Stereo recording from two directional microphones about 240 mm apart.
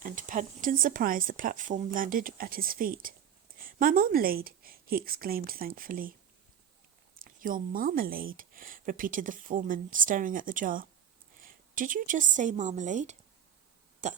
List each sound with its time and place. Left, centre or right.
0.0 s speech: right
7.2 s speech: right